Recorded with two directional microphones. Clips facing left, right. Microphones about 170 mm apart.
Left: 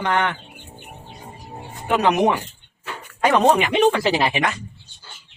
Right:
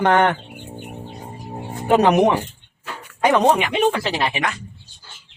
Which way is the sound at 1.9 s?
30° right (ahead or behind).